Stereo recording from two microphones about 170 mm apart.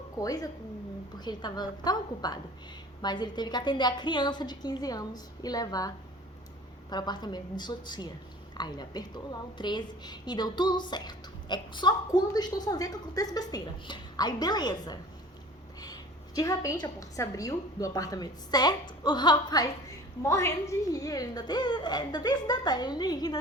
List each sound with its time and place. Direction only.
0.2 s a woman's voice: 20° left (ahead or behind)
6.9 s a woman's voice: 25° left (ahead or behind)